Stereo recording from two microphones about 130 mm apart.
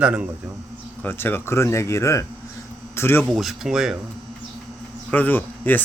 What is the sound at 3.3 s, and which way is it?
Speech, centre (ahead or behind).